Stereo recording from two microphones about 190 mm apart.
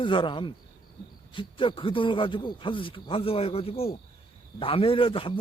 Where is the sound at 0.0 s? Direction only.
25° left (ahead or behind).